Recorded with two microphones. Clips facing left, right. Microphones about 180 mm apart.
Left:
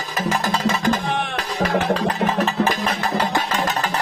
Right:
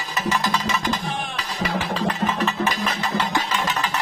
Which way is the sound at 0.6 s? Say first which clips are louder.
Left 5 dB; 50° left (ahead or behind).